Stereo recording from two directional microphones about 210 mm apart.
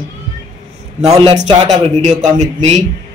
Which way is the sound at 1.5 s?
30° right (ahead or behind).